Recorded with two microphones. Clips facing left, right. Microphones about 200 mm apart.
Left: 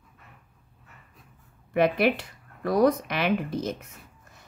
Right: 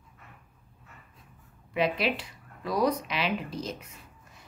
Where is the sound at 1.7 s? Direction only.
55° left (ahead or behind).